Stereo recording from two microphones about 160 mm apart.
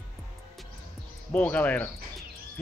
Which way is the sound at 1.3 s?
10° left (ahead or behind).